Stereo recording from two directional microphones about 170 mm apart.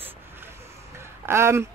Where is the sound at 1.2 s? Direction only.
15° right (ahead or behind).